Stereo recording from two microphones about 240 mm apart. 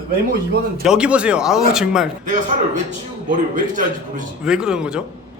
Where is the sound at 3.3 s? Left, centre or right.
Right.